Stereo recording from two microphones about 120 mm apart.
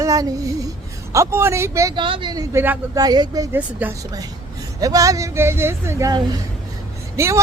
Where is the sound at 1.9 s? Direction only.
45° right (ahead or behind).